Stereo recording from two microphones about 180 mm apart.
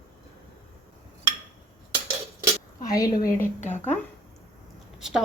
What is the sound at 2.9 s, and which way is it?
Speech, 20° left (ahead or behind).